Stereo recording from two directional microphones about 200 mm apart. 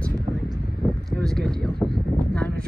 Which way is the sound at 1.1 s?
5° left (ahead or behind).